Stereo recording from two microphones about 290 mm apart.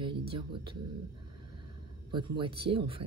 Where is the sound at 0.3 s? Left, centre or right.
Centre.